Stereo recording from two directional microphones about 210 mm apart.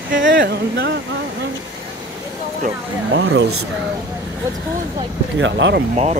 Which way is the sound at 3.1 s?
60° right (ahead or behind).